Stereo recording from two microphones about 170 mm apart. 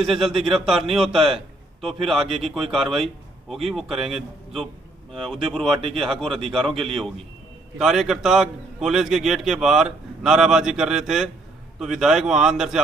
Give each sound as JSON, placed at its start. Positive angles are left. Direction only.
{"t": 0.0, "sound": "a man's voice", "side_deg": 0}
{"t": 2.2, "sound": "speech", "side_deg": -35}
{"t": 2.5, "sound": "a man's voice", "side_deg": 0}